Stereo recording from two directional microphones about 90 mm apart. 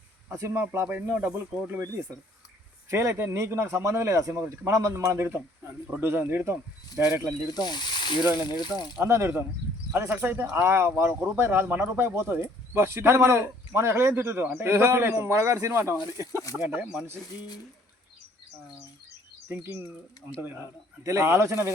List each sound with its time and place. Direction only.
0.3 s speech: 30° right (ahead or behind)
2.9 s speech: 35° right (ahead or behind)
7.6 s speech: 55° left (ahead or behind)
9.0 s speech: 30° right (ahead or behind); by 17.1 s 15° right (ahead or behind)
19.5 s speech: 25° right (ahead or behind)
20.2 s speech: 45° left (ahead or behind)
21.0 s speech: 35° right (ahead or behind)